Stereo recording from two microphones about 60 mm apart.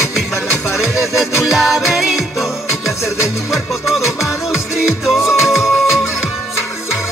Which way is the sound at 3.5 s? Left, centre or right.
Centre.